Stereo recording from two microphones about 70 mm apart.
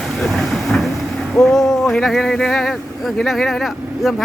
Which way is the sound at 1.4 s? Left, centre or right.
Centre.